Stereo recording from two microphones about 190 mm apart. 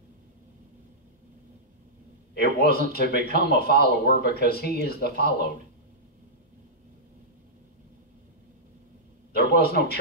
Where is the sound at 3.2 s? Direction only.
55° left (ahead or behind).